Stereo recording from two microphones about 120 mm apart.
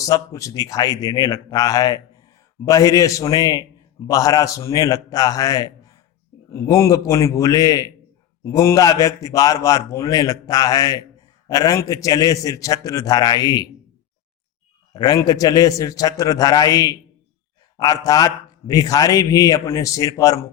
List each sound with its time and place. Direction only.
0.0 s a man's voice: 30° left (ahead or behind)
14.9 s a man's voice: 35° left (ahead or behind)